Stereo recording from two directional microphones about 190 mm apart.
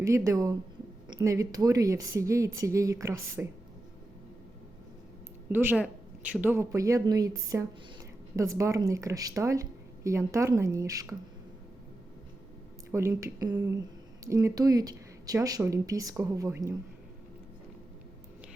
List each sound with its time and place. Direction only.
0.0 s speech: 15° right (ahead or behind)
5.5 s speech: 10° right (ahead or behind)
12.9 s speech: 15° right (ahead or behind)